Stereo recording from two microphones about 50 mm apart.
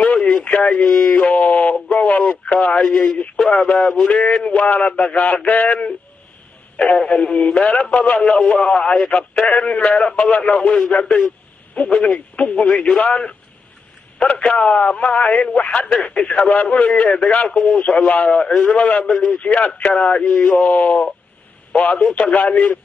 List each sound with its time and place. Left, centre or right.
0.0 s a sound: left
0.4 s speech: left
1.0 s a sound: left
2.4 s speech: left
7.1 s speech: left
14.2 s speech: left
18.4 s a man's voice: centre
18.8 s a man's voice: left
20.5 s speech: left